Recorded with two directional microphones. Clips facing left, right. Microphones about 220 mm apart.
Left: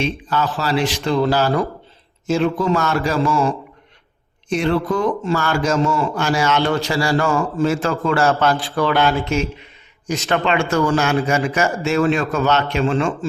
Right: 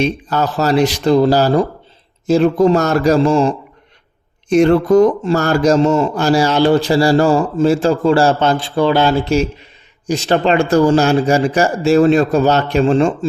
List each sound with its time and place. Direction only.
0.0 s speech: 40° right (ahead or behind)
4.4 s a man's voice: 45° right (ahead or behind)